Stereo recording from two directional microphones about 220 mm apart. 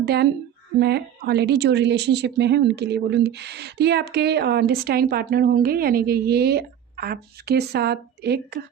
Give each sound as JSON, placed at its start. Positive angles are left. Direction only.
{"t": 0.0, "sound": "a woman's voice", "side_deg": -50}